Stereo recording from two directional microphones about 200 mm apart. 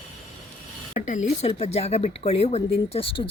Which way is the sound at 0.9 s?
40° left (ahead or behind).